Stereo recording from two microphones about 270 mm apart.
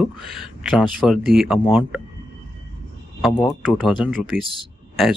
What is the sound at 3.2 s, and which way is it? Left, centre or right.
Speech, centre.